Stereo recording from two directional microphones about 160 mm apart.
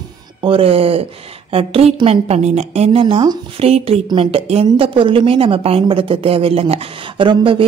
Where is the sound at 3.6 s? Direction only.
40° right (ahead or behind).